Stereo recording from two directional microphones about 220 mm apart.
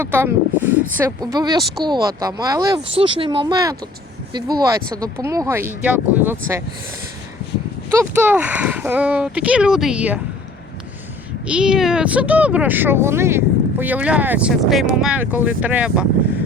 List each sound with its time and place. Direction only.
0.0 s speech: 10° right (ahead or behind)
7.9 s speech: 10° right (ahead or behind)
11.4 s speech: 5° right (ahead or behind)